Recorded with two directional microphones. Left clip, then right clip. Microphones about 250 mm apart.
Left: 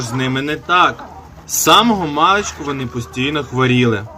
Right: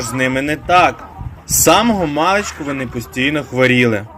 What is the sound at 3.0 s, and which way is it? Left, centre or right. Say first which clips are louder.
Speech: right 5 dB; left.